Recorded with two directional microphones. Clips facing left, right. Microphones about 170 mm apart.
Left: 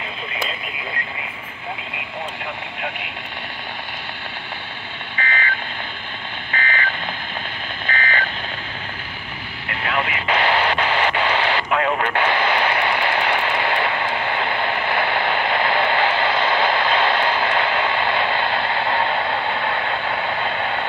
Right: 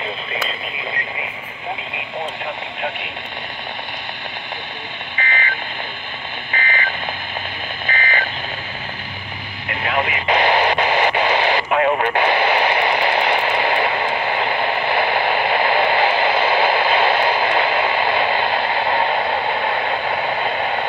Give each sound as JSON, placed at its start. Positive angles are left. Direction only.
{"t": 5.1, "sound": "telephone dialing", "side_deg": -15}
{"t": 6.5, "sound": "alarm clock", "side_deg": -15}
{"t": 7.8, "sound": "a sound", "side_deg": -10}
{"t": 9.7, "sound": "radio", "side_deg": -20}